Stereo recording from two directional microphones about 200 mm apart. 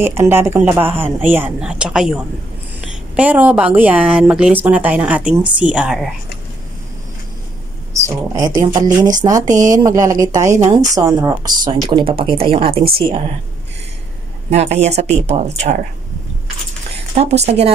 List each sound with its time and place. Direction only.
0.0 s a woman's voice: 10° right (ahead or behind)
8.5 s speech: 40° right (ahead or behind)
9.2 s a woman's voice: 15° right (ahead or behind)
14.5 s speech: 35° right (ahead or behind)
17.1 s speech: 30° right (ahead or behind)